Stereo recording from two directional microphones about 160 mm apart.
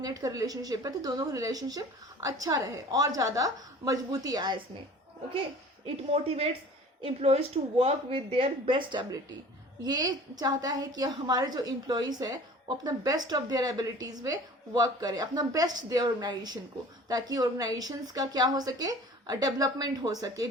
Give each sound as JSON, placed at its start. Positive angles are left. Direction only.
{"t": 0.0, "sound": "a woman's voice", "side_deg": -20}
{"t": 5.8, "sound": "a woman's voice", "side_deg": -40}